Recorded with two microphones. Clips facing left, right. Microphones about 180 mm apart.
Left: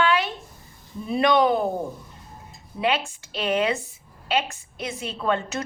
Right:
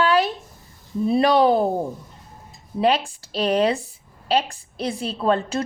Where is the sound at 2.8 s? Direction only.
40° right (ahead or behind).